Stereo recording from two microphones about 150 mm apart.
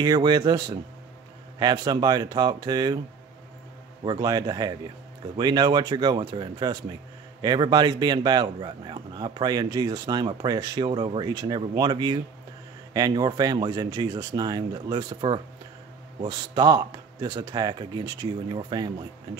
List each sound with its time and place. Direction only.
0.0 s a man's voice: 25° right (ahead or behind)
4.0 s a man's voice: 30° right (ahead or behind)